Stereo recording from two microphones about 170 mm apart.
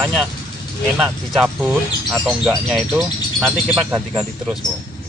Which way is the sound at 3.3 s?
15° right (ahead or behind).